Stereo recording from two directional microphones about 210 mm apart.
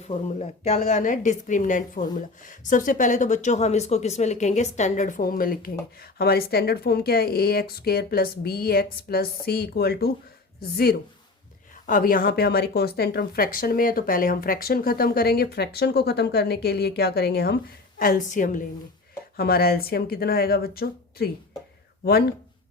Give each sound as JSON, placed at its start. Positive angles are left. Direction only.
{"t": 0.0, "sound": "a woman's voice", "side_deg": 30}